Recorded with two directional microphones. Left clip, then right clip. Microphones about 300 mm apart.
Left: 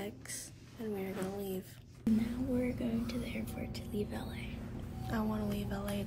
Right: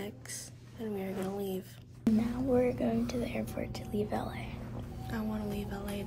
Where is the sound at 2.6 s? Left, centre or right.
Centre.